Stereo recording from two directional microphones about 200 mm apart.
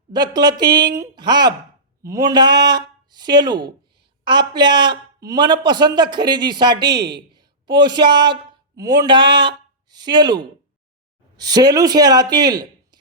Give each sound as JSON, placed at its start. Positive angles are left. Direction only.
{"t": 0.1, "sound": "a man's voice", "side_deg": -20}